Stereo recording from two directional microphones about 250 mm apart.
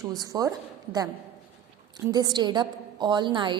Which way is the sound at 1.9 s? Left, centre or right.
Centre.